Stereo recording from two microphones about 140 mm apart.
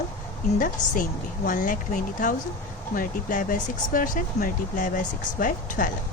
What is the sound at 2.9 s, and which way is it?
Speech, 70° left (ahead or behind).